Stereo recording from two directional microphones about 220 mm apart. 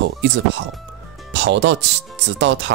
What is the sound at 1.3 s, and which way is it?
Speech, 55° right (ahead or behind).